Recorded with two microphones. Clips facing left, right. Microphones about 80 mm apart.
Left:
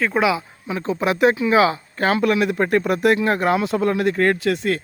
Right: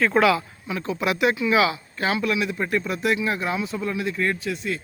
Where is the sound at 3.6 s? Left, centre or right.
Left.